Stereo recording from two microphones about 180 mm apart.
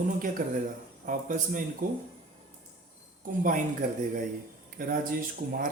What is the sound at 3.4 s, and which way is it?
A man's voice, 45° right (ahead or behind).